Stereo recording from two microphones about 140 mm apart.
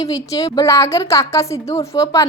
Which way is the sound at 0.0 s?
25° left (ahead or behind).